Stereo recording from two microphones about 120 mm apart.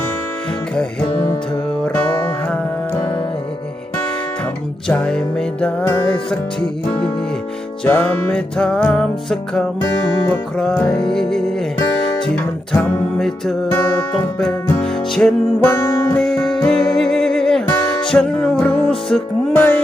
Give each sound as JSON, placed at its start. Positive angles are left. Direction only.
{"t": 4.9, "sound": "music", "side_deg": 10}
{"t": 7.9, "sound": "music", "side_deg": 15}
{"t": 12.7, "sound": "music", "side_deg": 0}
{"t": 13.7, "sound": "music", "side_deg": 15}
{"t": 14.3, "sound": "music", "side_deg": 5}
{"t": 15.6, "sound": "music", "side_deg": 20}
{"t": 16.2, "sound": "music", "side_deg": 5}